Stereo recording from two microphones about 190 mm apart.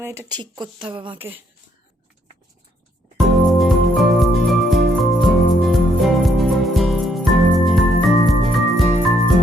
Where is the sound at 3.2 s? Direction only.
Centre (ahead or behind).